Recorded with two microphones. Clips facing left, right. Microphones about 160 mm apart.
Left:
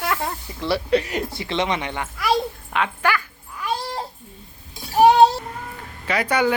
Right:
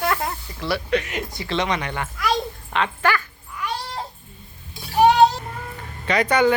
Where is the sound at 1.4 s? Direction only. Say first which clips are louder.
Right 1 dB; 25° left (ahead or behind).